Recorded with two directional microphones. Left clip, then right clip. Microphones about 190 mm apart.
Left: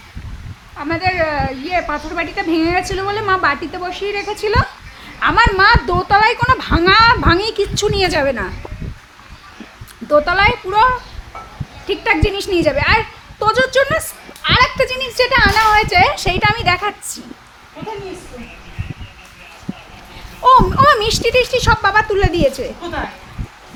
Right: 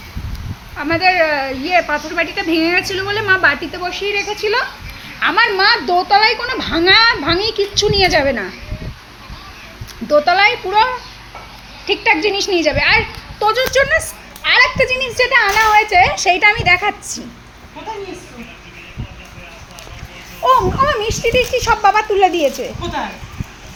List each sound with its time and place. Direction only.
0.8 s a woman's voice: 10° right (ahead or behind); by 8.4 s 10° left (ahead or behind)
10.1 s speech: 5° left (ahead or behind)
11.9 s a woman's voice: 10° left (ahead or behind)
20.4 s a woman's voice: 15° left (ahead or behind)
21.6 s speech: 5° left (ahead or behind)